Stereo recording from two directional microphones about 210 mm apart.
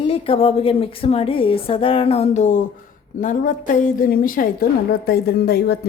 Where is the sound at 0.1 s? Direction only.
30° left (ahead or behind).